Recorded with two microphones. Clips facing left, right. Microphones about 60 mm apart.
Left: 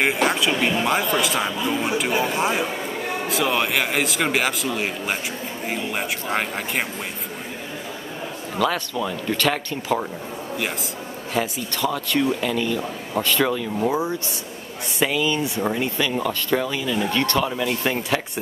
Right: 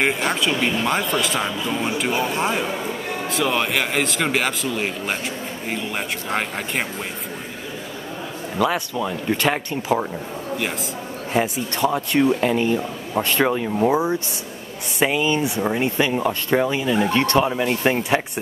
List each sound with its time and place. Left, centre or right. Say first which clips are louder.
0.0 s speech: left 1 dB; centre
8.5 s speech: right 1 dB; centre
11.3 s speech: right 3 dB; right